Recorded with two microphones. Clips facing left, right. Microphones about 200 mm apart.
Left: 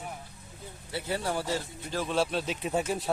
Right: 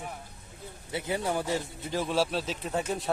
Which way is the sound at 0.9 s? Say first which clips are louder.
Right 1 dB; 15° right (ahead or behind).